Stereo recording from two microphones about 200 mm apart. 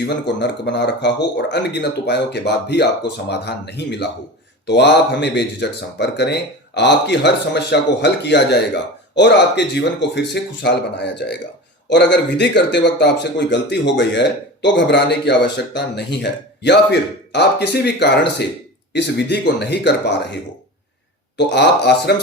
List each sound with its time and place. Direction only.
0.3 s speech: 60° left (ahead or behind)